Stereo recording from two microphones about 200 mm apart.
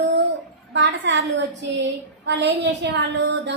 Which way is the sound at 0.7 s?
65° right (ahead or behind).